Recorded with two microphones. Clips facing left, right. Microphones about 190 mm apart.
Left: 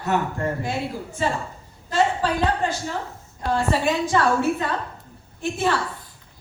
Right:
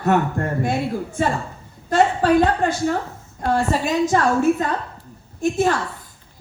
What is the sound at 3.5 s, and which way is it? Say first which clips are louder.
A woman's voice: right 1 dB; 40° right (ahead or behind).